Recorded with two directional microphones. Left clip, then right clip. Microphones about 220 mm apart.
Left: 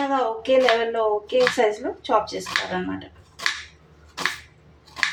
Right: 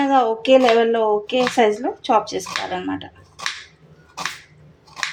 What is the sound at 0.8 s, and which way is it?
Speech, 45° right (ahead or behind).